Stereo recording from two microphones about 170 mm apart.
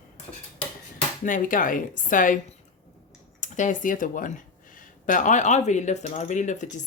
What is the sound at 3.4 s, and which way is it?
Speech, 50° left (ahead or behind).